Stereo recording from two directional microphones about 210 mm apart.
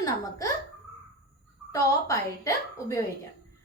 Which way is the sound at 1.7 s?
15° left (ahead or behind).